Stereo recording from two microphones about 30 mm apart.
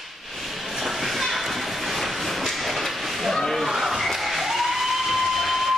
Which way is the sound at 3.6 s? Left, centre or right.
Centre.